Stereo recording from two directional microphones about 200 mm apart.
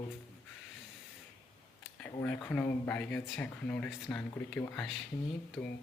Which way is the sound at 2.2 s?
10° left (ahead or behind).